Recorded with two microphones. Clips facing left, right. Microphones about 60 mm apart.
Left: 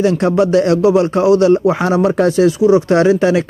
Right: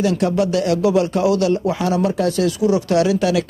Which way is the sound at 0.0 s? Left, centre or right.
Left.